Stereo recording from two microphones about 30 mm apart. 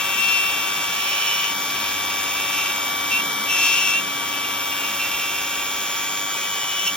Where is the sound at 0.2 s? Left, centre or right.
Left.